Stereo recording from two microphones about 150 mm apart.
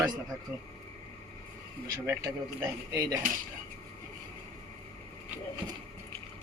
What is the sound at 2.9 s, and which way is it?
Speech, 25° right (ahead or behind).